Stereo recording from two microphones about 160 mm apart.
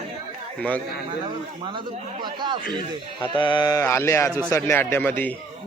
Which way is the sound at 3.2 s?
30° left (ahead or behind).